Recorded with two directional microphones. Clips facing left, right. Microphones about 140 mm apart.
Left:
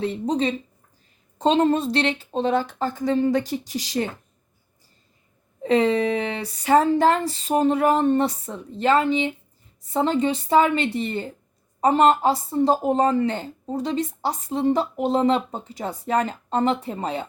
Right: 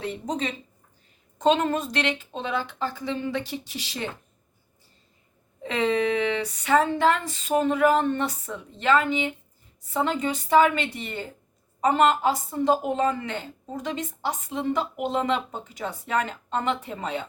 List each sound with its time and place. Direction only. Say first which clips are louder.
0.0 s a woman's voice: left 6 dB; 30° left (ahead or behind)
5.6 s a woman's voice: left 4 dB; 35° left (ahead or behind)